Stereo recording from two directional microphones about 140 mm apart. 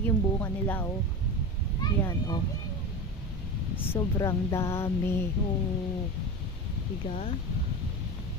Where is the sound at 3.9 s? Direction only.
20° left (ahead or behind).